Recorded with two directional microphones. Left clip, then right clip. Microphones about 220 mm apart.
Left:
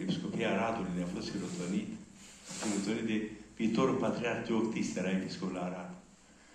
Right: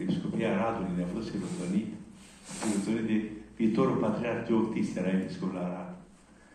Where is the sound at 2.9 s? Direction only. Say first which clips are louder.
Right 4 dB; 25° left (ahead or behind).